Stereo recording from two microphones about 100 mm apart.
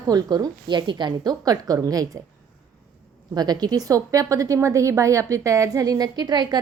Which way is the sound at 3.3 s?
45° right (ahead or behind).